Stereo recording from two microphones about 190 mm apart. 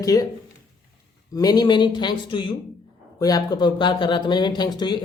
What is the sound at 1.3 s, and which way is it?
Speech, 20° left (ahead or behind).